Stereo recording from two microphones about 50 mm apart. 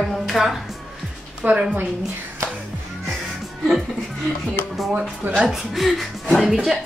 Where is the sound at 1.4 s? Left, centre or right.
Right.